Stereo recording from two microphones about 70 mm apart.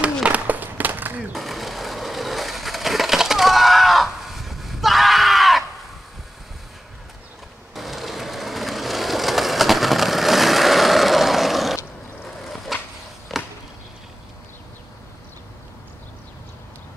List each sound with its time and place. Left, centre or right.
0.0 s skateboard: centre
1.3 s skateboard: centre
7.7 s a sound: centre